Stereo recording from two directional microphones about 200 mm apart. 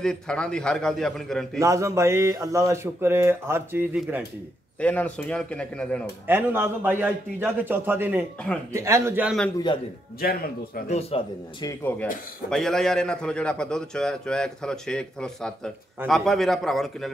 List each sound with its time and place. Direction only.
0.0 s a man's voice: 5° left (ahead or behind)
1.6 s speech: 15° right (ahead or behind)
4.7 s a man's voice: 5° left (ahead or behind)
6.2 s speech: 10° right (ahead or behind)
10.2 s speech: 50° left (ahead or behind)
10.9 s speech: 30° left (ahead or behind)
11.6 s a man's voice: 10° left (ahead or behind)